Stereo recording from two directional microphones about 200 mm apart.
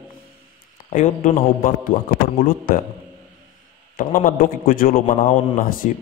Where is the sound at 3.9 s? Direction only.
45° left (ahead or behind).